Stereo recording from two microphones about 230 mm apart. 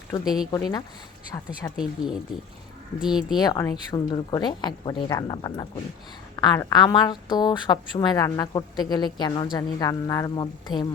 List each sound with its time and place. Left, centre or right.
0.5 s a woman's voice: centre
1.7 s speech: centre
3.3 s a woman's voice: centre